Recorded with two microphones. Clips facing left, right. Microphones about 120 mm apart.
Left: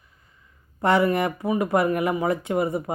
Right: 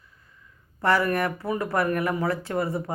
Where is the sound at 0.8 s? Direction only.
20° left (ahead or behind).